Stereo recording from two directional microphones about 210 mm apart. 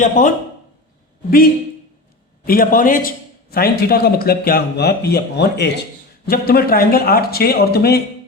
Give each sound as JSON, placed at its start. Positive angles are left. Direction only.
{"t": 0.0, "sound": "speech", "side_deg": 35}
{"t": 2.4, "sound": "a man's voice", "side_deg": 45}